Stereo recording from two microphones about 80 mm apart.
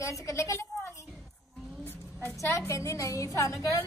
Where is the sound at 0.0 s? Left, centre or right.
Left.